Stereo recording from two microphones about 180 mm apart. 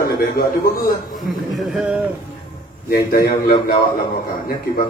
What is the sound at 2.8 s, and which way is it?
A man's voice, 55° left (ahead or behind).